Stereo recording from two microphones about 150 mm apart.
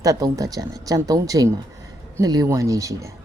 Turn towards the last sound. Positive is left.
turn(degrees=-20)  # may be behind; listen again after turning